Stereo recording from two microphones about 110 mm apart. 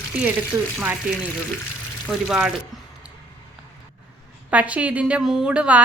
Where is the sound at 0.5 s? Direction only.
20° right (ahead or behind).